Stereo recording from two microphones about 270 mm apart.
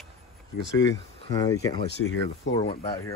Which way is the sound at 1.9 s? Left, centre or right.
Left.